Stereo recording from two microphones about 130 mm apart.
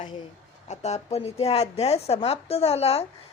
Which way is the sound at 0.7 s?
60° left (ahead or behind).